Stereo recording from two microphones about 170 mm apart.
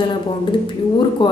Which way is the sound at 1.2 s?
25° left (ahead or behind).